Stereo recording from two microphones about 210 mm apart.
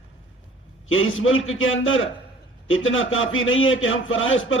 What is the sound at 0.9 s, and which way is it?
A man's voice, 70° left (ahead or behind).